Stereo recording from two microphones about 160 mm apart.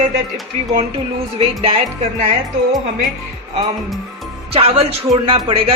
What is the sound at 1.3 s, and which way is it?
Speech, 35° right (ahead or behind).